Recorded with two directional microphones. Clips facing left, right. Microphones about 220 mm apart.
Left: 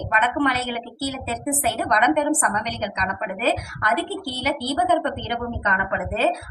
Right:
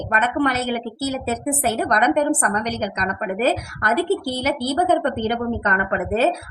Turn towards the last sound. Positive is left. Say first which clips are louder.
# right 3 dB
turn(degrees=-45)  # may be behind; listen again after turning